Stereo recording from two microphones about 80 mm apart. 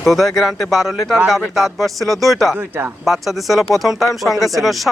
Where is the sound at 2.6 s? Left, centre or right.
Right.